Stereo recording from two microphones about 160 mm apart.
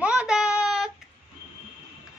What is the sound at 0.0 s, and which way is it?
Child singing, 5° right (ahead or behind).